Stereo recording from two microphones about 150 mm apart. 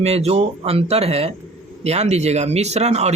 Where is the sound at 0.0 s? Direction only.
45° right (ahead or behind).